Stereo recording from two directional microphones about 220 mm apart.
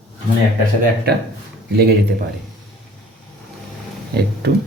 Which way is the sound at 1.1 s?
45° right (ahead or behind).